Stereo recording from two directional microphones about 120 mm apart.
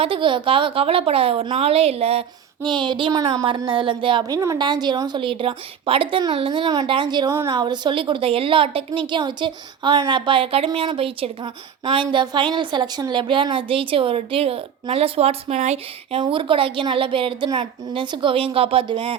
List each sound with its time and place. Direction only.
0.0 s a woman's voice: 45° right (ahead or behind)
2.6 s a woman's voice: 40° right (ahead or behind)
4.2 s a woman's voice: 30° right (ahead or behind)
7.3 s a woman's voice: 25° right (ahead or behind); by 16.2 s 65° right (ahead or behind)
16.2 s a woman's voice: 45° right (ahead or behind)